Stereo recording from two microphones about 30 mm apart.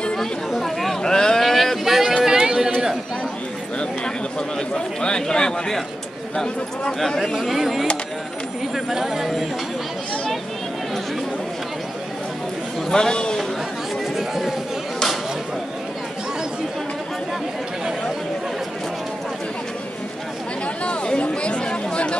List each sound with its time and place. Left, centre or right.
0.6 s chatter: centre
1.0 s vehicle: left
1.4 s vehicle: centre
2.2 s chatter: centre
4.6 s a man's voice: left
7.2 s speech: centre
12.9 s a man's voice: left
14.1 s chatter: centre
20.6 s speech: left